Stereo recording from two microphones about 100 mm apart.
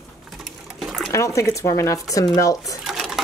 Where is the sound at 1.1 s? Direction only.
30° left (ahead or behind).